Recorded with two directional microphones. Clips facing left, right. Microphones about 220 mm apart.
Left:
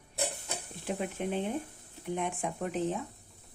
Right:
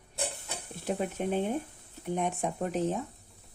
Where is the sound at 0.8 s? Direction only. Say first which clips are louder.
Right 3 dB; 45° right (ahead or behind).